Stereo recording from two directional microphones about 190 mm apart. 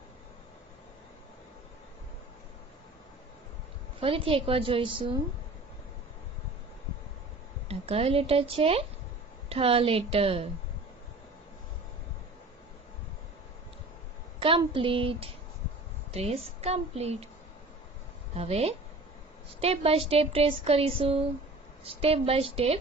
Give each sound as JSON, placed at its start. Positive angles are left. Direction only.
{"t": 4.0, "sound": "a woman's voice", "side_deg": -30}
{"t": 7.6, "sound": "speech", "side_deg": -30}
{"t": 14.4, "sound": "a woman's voice", "side_deg": -30}
{"t": 18.3, "sound": "speech", "side_deg": -30}